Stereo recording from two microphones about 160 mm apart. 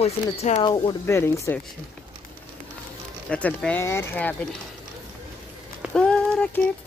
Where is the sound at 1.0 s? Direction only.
15° left (ahead or behind).